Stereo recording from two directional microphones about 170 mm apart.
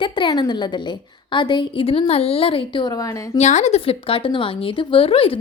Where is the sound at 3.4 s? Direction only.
45° left (ahead or behind).